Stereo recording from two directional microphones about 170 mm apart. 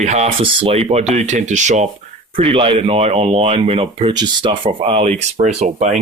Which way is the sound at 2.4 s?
35° right (ahead or behind).